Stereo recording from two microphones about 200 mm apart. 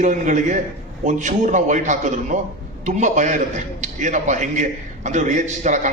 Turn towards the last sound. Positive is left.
turn(degrees=-40)  # may be behind; listen again after turning